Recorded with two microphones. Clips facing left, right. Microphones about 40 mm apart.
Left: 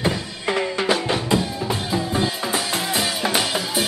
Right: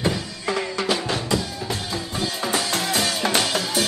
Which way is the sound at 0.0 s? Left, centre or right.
Left.